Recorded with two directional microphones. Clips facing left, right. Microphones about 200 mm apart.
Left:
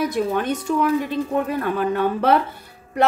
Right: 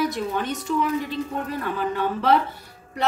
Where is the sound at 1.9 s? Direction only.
55° left (ahead or behind).